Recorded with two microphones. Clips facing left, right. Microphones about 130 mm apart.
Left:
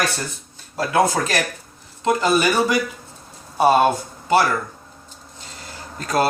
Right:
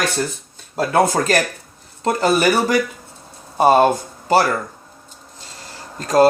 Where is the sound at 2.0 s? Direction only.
40° right (ahead or behind).